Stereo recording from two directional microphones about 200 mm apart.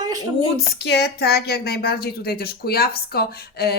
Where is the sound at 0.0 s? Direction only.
20° right (ahead or behind).